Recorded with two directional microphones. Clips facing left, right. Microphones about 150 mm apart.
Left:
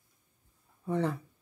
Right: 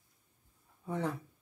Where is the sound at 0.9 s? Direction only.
5° right (ahead or behind).